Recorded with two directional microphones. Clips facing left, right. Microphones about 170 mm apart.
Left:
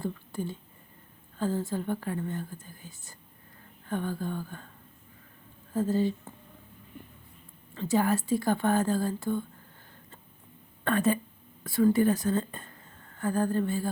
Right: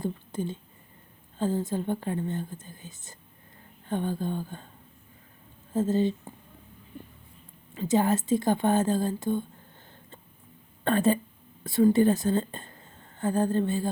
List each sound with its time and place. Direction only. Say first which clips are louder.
0.0 s a sound: right 2 dB; 20° right (ahead or behind)
1.4 s speech: right 2 dB; 20° right (ahead or behind)
5.7 s speech: right 2 dB; 20° right (ahead or behind)
7.7 s speech: right 2 dB; 20° right (ahead or behind)
10.8 s speech: right 2 dB; 30° right (ahead or behind)